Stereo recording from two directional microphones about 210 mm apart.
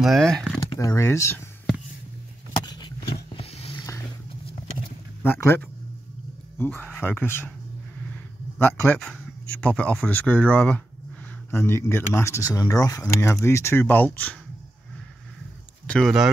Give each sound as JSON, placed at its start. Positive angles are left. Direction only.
{"t": 0.0, "sound": "speech", "side_deg": 0}
{"t": 0.7, "sound": "speech", "side_deg": 15}
{"t": 2.6, "sound": "a sound", "side_deg": 20}
{"t": 3.3, "sound": "roaring cats", "side_deg": 30}
{"t": 5.2, "sound": "speech", "side_deg": 10}
{"t": 7.0, "sound": "speech", "side_deg": 10}
{"t": 15.9, "sound": "speech", "side_deg": 0}